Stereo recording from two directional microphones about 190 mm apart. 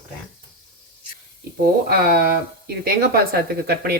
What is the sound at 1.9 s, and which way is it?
Speech, 55° right (ahead or behind).